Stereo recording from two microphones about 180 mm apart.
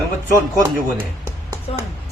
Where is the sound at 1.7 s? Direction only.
30° left (ahead or behind).